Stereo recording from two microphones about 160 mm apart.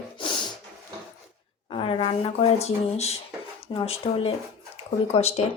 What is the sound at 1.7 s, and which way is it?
Speech, 35° left (ahead or behind).